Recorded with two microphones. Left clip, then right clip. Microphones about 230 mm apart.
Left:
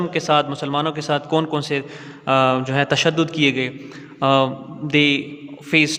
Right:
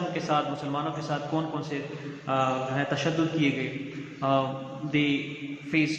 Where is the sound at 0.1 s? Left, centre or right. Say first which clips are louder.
Left 10 dB; left.